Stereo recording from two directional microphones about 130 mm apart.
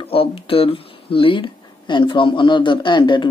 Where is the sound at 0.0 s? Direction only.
45° left (ahead or behind).